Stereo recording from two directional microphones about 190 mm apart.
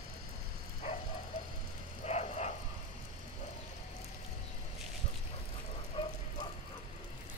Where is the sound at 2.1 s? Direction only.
35° left (ahead or behind).